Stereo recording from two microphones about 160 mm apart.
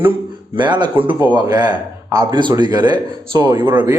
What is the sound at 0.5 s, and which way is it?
Speech, 30° right (ahead or behind).